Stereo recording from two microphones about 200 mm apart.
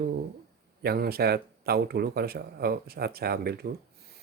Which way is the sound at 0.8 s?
50° right (ahead or behind).